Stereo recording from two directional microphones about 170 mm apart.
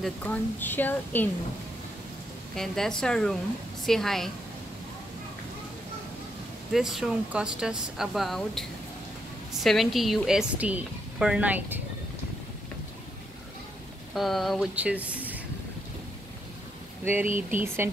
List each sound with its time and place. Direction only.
0.0 s a woman's voice: 10° left (ahead or behind)
2.5 s a woman's voice: centre (ahead or behind)
6.7 s a woman's voice: centre (ahead or behind)
14.1 s speech: centre (ahead or behind)
17.0 s speech: 10° right (ahead or behind)
17.3 s speech: 50° right (ahead or behind)